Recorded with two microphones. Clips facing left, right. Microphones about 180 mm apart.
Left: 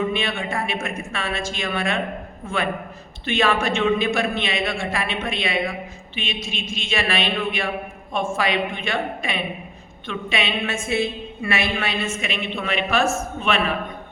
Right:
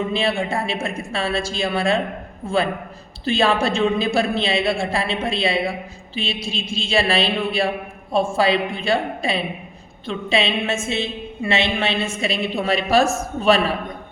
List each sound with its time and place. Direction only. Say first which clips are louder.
0.1 s a woman's voice: right 4 dB; 30° right (ahead or behind)